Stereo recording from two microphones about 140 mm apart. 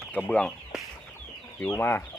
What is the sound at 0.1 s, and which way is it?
Speech, 10° left (ahead or behind).